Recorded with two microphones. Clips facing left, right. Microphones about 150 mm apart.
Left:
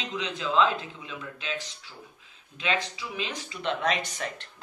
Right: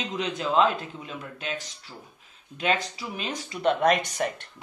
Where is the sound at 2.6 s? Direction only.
40° right (ahead or behind).